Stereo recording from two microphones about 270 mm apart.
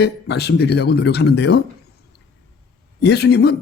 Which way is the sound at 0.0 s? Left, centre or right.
Left.